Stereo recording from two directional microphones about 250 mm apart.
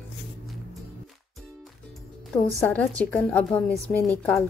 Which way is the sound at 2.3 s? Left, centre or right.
Centre.